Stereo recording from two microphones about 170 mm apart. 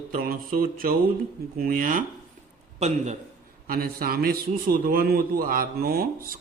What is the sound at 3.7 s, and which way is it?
A man's voice, 60° right (ahead or behind).